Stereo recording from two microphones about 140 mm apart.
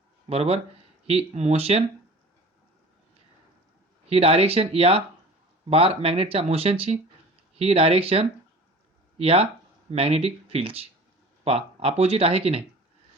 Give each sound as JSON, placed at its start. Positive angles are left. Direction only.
{"t": 0.3, "sound": "speech", "side_deg": -45}
{"t": 4.1, "sound": "speech", "side_deg": -45}